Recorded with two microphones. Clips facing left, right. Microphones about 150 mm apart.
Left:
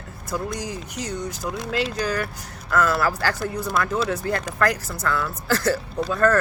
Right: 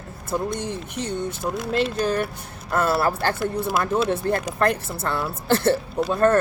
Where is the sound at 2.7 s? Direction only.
30° right (ahead or behind).